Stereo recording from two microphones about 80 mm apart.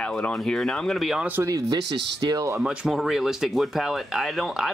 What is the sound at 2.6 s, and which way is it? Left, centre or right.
Speech, centre.